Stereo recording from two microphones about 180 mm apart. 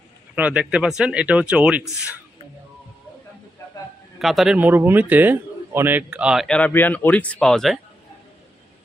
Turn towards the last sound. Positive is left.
turn(degrees=0)  # may be behind; listen again after turning